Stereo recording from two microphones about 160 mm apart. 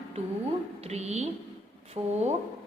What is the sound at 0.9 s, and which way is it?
A woman's voice, 45° right (ahead or behind).